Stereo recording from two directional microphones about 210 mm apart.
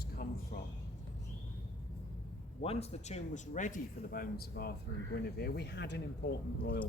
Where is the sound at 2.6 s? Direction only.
30° left (ahead or behind).